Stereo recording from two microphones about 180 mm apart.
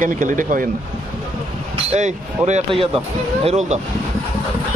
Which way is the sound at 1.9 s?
40° right (ahead or behind).